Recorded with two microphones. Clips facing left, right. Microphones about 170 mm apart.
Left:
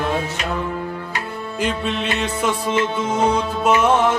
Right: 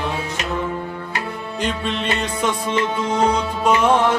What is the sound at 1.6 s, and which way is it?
Music, 5° left (ahead or behind).